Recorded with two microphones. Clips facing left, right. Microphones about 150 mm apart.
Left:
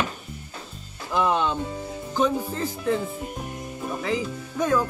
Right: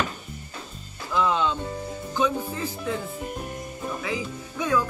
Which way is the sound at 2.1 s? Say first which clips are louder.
Left 2 dB; 45° left (ahead or behind).